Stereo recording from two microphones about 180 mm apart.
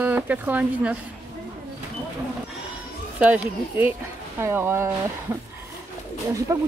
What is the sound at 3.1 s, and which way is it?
Speech, 10° right (ahead or behind).